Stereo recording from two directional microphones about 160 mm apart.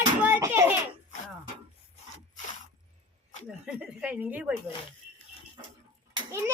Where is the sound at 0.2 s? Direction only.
10° right (ahead or behind).